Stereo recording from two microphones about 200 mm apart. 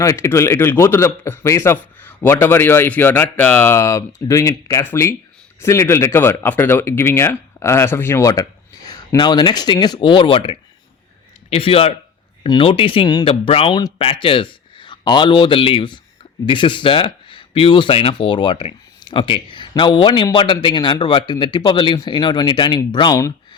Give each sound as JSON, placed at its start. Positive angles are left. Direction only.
{"t": 0.0, "sound": "a man's voice", "side_deg": 15}